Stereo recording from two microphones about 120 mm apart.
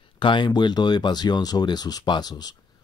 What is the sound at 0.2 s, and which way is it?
Speech, 40° left (ahead or behind).